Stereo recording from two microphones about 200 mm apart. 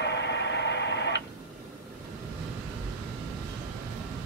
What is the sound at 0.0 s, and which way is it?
Radio, 60° left (ahead or behind).